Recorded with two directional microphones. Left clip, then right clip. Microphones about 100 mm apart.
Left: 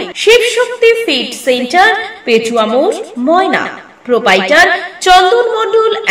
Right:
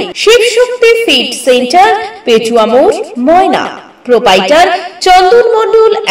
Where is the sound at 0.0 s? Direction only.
35° right (ahead or behind).